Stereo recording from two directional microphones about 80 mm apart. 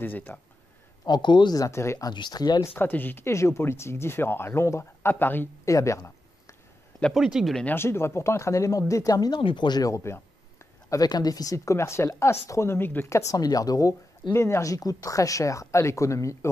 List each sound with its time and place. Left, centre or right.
0.0 s speech: left
1.0 s speech: left
1.6 s speech: left
2.1 s speech: left
2.6 s speech: left
3.3 s speech: left
5.7 s a sound: left
7.2 s speech: centre
7.6 s speech: left
9.3 s speech: left
9.8 s a sound: left
11.0 s speech: left
13.3 s speech: left
14.3 s speech: left